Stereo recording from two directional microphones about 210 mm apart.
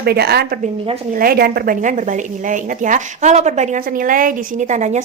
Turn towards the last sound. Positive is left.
turn(degrees=-35)  # may be behind; listen again after turning